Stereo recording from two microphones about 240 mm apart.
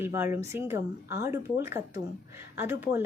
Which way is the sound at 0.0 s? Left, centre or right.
Centre.